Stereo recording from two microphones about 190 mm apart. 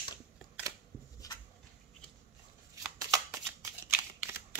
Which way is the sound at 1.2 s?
20° left (ahead or behind).